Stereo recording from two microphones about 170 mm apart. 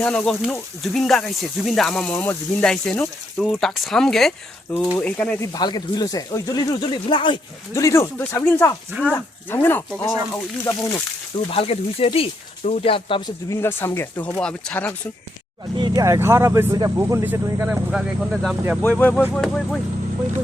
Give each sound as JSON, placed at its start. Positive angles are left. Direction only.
{"t": 0.0, "sound": "speech", "side_deg": 5}
{"t": 5.5, "sound": "speech", "side_deg": 25}
{"t": 11.5, "sound": "speech", "side_deg": 35}
{"t": 13.5, "sound": "speech", "side_deg": 15}
{"t": 15.8, "sound": "speech", "side_deg": -20}
{"t": 17.7, "sound": "speech", "side_deg": -5}
{"t": 18.8, "sound": "speech", "side_deg": 10}